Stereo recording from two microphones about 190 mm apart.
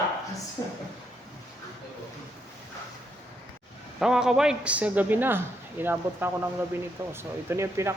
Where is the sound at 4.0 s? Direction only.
5° right (ahead or behind).